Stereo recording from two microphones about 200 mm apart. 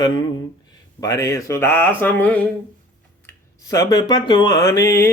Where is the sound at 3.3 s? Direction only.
20° left (ahead or behind).